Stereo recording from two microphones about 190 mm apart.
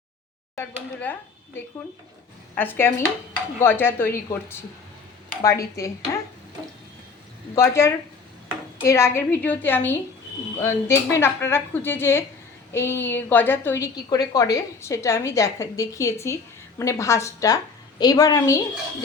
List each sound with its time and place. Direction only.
0.5 s a woman's voice: 10° left (ahead or behind)
2.6 s a woman's voice: 10° left (ahead or behind)
7.5 s a woman's voice: 15° left (ahead or behind)